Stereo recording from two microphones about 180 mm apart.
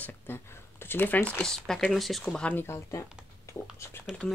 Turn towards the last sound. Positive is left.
turn(degrees=5)  # may be behind; listen again after turning